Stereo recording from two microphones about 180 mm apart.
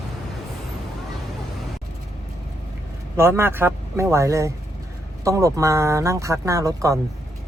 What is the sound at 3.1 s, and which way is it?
Speech, 15° right (ahead or behind).